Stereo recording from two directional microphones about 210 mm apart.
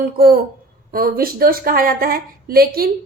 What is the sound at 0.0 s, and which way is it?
A woman's voice, 45° right (ahead or behind).